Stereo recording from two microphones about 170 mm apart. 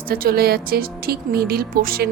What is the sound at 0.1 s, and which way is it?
Speech, 65° right (ahead or behind).